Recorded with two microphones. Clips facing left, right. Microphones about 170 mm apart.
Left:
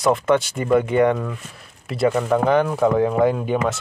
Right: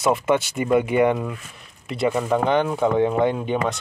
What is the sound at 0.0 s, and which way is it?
Speech, 5° right (ahead or behind).